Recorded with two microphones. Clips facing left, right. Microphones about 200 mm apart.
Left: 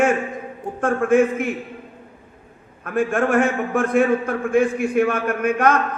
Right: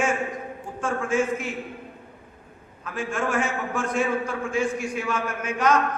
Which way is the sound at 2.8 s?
55° left (ahead or behind).